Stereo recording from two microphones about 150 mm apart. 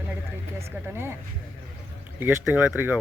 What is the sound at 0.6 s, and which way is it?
Speech, 15° right (ahead or behind).